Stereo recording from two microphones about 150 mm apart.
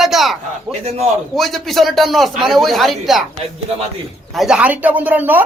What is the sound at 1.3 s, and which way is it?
Speech, centre (ahead or behind).